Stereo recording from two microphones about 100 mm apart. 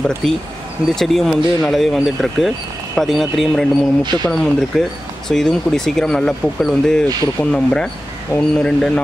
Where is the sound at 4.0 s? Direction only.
45° right (ahead or behind).